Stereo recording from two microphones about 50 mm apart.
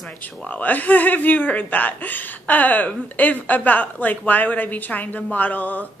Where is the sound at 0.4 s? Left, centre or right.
Left.